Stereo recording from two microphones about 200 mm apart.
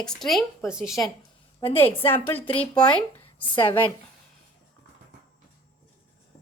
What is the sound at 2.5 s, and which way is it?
Speech, 25° left (ahead or behind).